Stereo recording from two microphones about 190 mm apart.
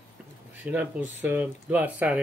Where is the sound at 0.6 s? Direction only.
10° right (ahead or behind).